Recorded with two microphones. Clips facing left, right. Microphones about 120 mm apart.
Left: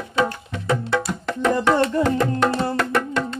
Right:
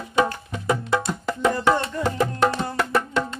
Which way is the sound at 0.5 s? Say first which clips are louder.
Left 1 dB; 10° right (ahead or behind).